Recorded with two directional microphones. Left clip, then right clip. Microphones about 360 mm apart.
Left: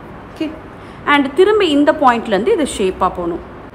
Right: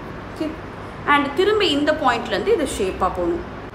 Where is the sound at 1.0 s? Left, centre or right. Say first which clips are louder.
Left 5 dB; centre.